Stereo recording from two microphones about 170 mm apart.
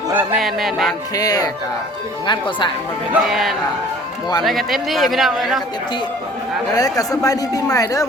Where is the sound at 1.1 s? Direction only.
20° left (ahead or behind).